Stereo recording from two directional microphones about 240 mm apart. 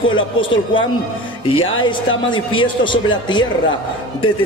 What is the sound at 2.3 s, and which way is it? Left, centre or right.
A man's voice, left.